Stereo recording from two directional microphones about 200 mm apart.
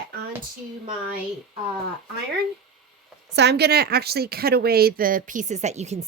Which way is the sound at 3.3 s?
55° right (ahead or behind).